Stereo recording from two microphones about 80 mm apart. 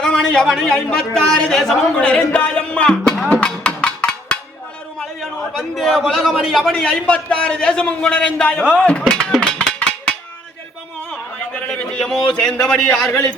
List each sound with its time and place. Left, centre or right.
0.0 s a man's voice: centre
2.0 s music: centre
3.4 s percussion: centre
4.9 s a man's voice: centre
11.7 s a sound: centre
12.3 s a man's voice: centre